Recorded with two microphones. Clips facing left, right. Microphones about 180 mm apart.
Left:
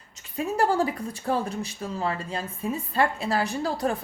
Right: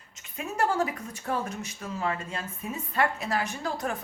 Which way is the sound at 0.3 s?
35° left (ahead or behind).